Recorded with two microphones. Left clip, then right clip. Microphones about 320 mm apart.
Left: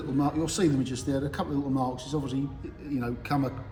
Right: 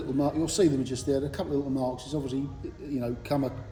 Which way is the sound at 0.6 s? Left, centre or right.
Centre.